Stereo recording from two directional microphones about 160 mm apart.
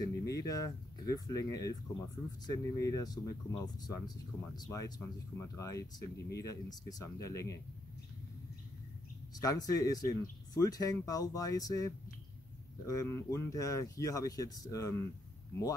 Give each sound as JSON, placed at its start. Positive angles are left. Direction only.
{"t": 0.0, "sound": "speech", "side_deg": 20}
{"t": 9.4, "sound": "speech", "side_deg": 25}